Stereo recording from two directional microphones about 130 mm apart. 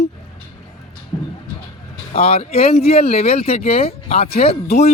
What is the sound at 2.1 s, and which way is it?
Speech, 50° left (ahead or behind).